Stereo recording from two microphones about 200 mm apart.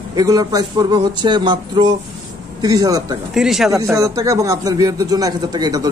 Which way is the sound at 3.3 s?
Centre (ahead or behind).